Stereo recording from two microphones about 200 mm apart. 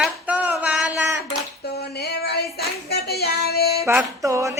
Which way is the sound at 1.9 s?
55° left (ahead or behind).